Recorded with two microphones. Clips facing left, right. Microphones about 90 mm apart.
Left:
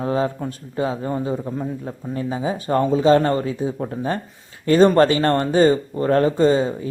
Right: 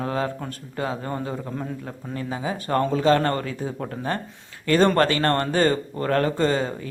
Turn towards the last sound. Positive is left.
turn(degrees=20)  # may be behind; listen again after turning